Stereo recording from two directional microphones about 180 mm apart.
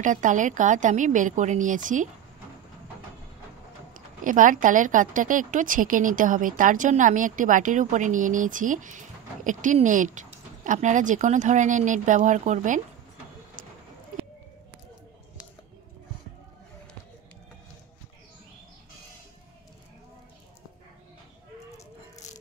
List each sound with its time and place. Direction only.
0.0 s a woman's voice: 45° right (ahead or behind)
4.2 s a woman's voice: 45° right (ahead or behind)
22.1 s music: 40° left (ahead or behind)